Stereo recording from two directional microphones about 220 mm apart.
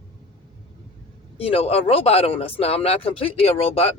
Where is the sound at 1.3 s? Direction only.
25° left (ahead or behind).